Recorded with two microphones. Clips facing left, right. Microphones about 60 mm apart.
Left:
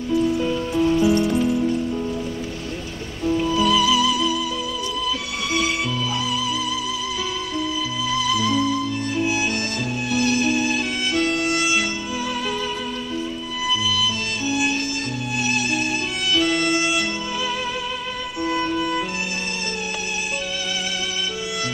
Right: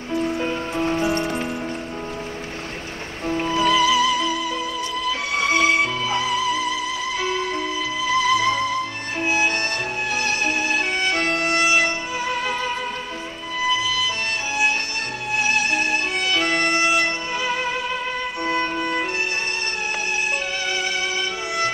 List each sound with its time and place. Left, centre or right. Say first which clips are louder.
0.1 s music: left 3 dB; right
3.3 s music: left 1 dB; right
8.1 s music: right 3 dB; right
13.7 s music: even; right